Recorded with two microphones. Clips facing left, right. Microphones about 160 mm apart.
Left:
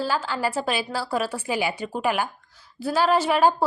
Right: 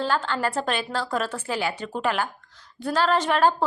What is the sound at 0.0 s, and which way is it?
A woman's voice, 5° left (ahead or behind).